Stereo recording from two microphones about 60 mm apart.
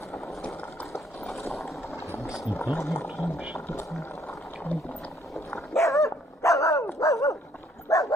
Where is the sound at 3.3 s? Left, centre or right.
Centre.